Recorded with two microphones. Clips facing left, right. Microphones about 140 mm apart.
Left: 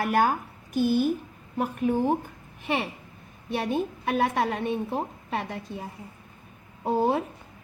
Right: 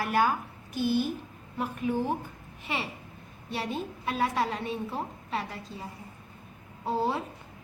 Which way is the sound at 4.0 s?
55° left (ahead or behind).